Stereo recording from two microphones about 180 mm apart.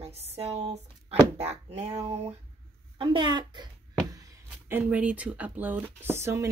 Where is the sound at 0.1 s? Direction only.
35° right (ahead or behind).